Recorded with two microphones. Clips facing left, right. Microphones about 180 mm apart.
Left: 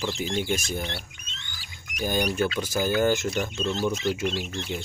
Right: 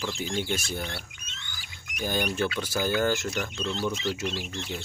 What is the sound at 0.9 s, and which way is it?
Rodents, 25° left (ahead or behind).